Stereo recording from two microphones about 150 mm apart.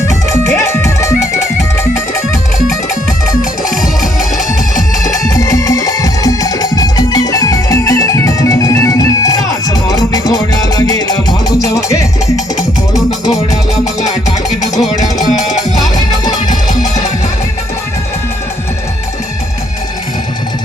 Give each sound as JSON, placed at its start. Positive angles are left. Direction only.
{"t": 0.6, "sound": "music", "side_deg": 20}
{"t": 4.0, "sound": "music", "side_deg": 0}
{"t": 5.0, "sound": "music", "side_deg": 25}
{"t": 14.6, "sound": "music", "side_deg": 55}